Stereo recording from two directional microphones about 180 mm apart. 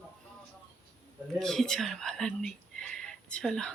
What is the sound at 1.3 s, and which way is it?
Speech, centre (ahead or behind).